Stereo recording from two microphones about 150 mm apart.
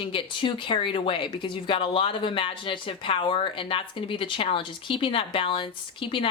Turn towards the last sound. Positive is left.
turn(degrees=35)  # may be behind; listen again after turning